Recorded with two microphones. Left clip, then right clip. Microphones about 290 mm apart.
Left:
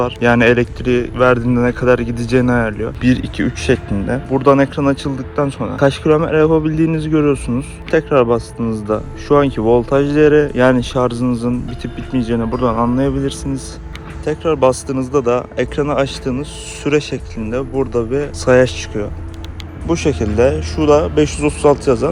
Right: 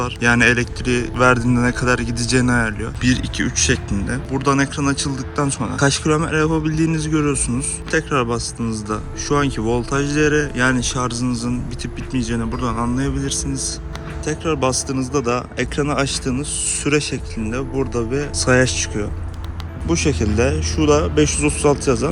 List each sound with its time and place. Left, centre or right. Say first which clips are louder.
0.0 s speech: left 3 dB; centre